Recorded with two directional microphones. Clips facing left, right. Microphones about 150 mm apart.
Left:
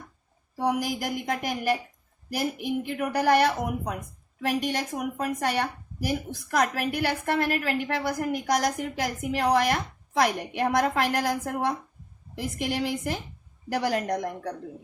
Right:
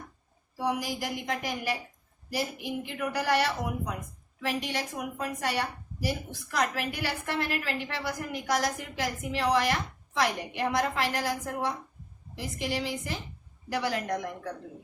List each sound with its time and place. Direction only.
0.5 s a woman's voice: 45° left (ahead or behind)
2.8 s a woman's voice: 50° left (ahead or behind)